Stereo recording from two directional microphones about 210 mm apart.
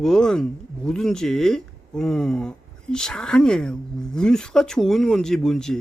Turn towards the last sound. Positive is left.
turn(degrees=0)  # may be behind; listen again after turning